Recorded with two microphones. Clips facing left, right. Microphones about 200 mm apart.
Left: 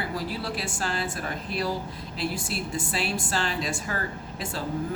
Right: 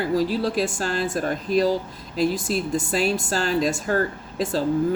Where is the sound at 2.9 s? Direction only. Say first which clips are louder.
Right 6 dB; 40° right (ahead or behind).